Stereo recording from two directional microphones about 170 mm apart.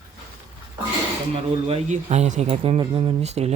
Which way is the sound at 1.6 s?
40° right (ahead or behind).